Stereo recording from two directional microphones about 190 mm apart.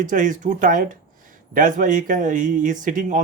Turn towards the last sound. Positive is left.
turn(degrees=-40)  # may be behind; listen again after turning